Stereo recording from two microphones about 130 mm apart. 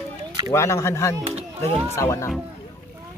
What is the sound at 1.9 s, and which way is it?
Speech, 20° left (ahead or behind).